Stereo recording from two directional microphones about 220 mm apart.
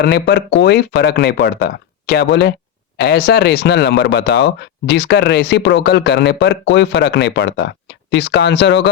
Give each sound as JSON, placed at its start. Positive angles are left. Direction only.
{"t": 0.0, "sound": "speech", "side_deg": 50}